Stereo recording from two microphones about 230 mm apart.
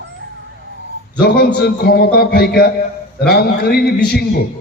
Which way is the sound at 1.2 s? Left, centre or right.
Left.